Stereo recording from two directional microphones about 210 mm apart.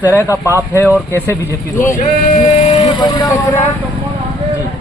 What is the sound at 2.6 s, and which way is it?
Speech, 25° left (ahead or behind).